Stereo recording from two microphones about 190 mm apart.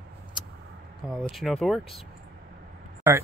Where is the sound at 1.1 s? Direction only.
Centre (ahead or behind).